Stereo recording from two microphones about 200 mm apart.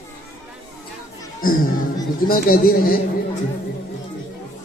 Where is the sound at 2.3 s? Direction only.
45° left (ahead or behind).